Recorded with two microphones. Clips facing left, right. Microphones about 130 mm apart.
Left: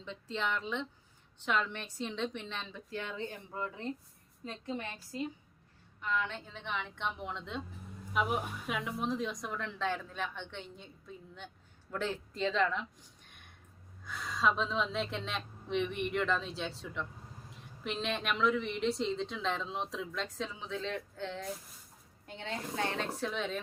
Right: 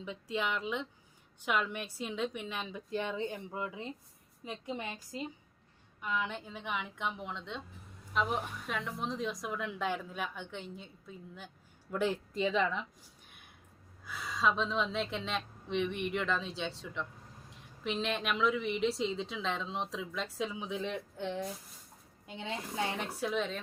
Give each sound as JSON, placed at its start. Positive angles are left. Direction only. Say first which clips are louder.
{"t": 0.0, "sound": "a woman's voice", "louder": "right 1 dB", "side_deg": -10}
{"t": 13.2, "sound": "a sound", "louder": "even", "side_deg": -5}
{"t": 14.0, "sound": "a woman's voice", "louder": "even", "side_deg": -5}